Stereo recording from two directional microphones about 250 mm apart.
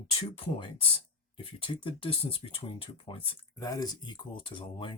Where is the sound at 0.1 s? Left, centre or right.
Left.